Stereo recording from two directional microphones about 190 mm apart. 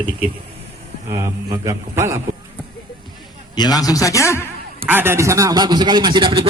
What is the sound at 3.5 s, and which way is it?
Speech, 20° left (ahead or behind).